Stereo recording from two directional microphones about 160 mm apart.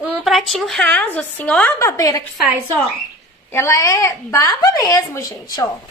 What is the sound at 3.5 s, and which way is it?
A woman's voice, 20° left (ahead or behind).